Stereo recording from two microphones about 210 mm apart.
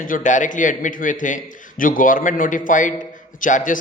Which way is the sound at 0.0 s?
40° left (ahead or behind).